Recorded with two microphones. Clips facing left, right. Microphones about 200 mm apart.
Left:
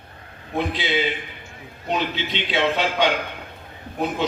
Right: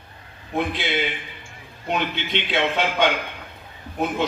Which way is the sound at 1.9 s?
55° right (ahead or behind).